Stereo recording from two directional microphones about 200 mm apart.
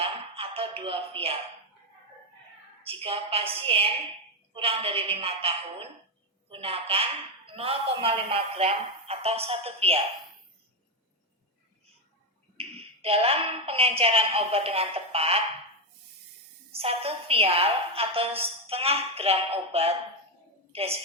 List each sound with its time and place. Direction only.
0.0 s music: 30° right (ahead or behind)
2.8 s a woman's voice: 30° right (ahead or behind)
12.5 s a woman's voice: 30° right (ahead or behind)
16.7 s a woman's voice: 30° right (ahead or behind)